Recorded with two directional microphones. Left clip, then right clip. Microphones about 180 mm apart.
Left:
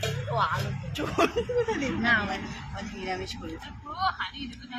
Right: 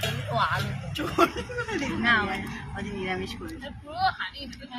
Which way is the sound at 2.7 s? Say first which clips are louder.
Right 2 dB; 40° left (ahead or behind).